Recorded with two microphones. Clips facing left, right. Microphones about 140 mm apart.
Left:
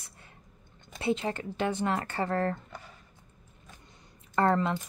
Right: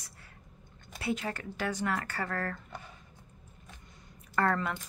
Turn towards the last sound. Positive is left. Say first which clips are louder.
# left 4 dB
turn(degrees=25)  # may be behind; listen again after turning